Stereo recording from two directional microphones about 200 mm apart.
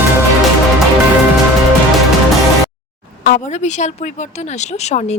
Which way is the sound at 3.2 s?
40° left (ahead or behind).